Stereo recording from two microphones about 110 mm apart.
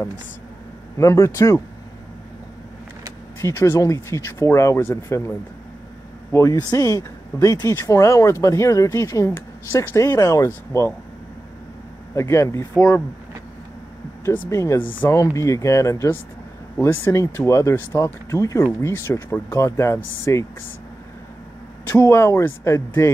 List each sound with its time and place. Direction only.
0.9 s speech: 30° left (ahead or behind)
3.3 s speech: 25° left (ahead or behind)
6.3 s speech: 25° left (ahead or behind)
12.2 s speech: 25° left (ahead or behind)
14.2 s speech: 25° left (ahead or behind)
21.8 s speech: 25° left (ahead or behind)